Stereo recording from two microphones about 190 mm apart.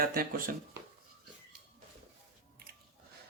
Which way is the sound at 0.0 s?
50° right (ahead or behind).